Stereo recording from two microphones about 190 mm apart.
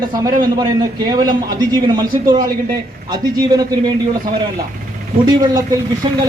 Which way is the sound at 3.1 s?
20° right (ahead or behind).